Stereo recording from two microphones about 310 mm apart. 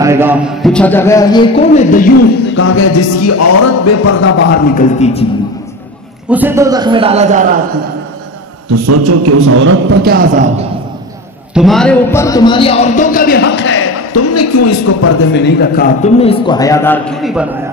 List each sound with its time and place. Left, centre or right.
0.0 s a man's voice: centre; by 2.5 s left
2.5 s music: left
4.5 s a man's voice: left
6.3 s a man's voice: centre
8.6 s a man's voice: right
11.5 s a man's voice: centre; by 15.1 s left
15.3 s a man's voice: left; by 17.5 s centre